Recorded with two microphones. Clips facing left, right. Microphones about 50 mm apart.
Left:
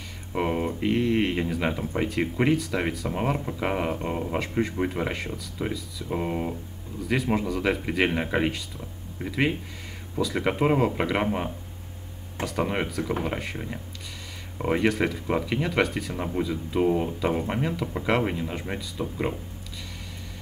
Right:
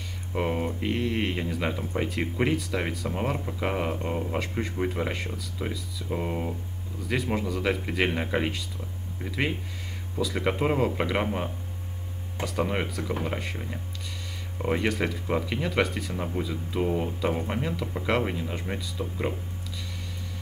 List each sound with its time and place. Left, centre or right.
0.3 s speech: centre